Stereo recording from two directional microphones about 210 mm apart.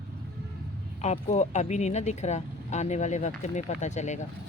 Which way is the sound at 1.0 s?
35° left (ahead or behind).